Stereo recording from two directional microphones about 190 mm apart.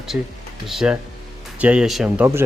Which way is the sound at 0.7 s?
Centre (ahead or behind).